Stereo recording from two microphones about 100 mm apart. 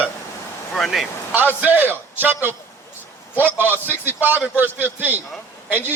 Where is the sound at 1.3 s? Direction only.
20° right (ahead or behind).